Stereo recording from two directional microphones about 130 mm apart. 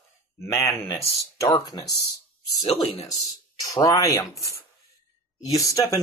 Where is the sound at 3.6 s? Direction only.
30° left (ahead or behind).